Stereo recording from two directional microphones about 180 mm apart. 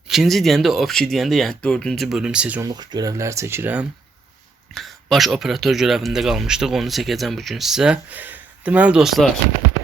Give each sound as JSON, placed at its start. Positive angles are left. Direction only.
{"t": 0.1, "sound": "speech", "side_deg": 0}
{"t": 2.6, "sound": "speech", "side_deg": -20}
{"t": 4.7, "sound": "speech", "side_deg": 0}